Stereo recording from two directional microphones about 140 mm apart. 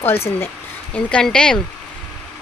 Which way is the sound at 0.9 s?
5° left (ahead or behind).